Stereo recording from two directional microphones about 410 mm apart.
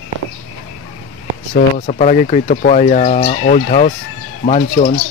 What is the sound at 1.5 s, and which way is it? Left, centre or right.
Speech, centre.